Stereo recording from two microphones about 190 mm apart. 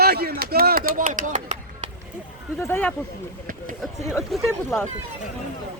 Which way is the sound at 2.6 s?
10° left (ahead or behind).